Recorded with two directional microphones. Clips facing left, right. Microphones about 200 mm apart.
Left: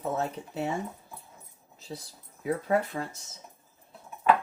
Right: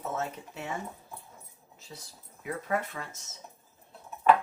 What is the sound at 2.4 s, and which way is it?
Speech, 35° left (ahead or behind).